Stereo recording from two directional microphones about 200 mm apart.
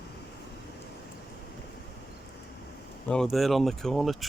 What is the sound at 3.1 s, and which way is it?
Speech, centre (ahead or behind).